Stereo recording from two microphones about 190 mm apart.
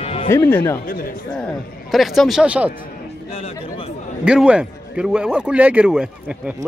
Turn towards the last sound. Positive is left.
turn(degrees=-5)  # may be behind; listen again after turning